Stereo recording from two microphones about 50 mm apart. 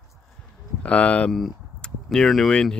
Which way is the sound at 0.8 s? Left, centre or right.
Left.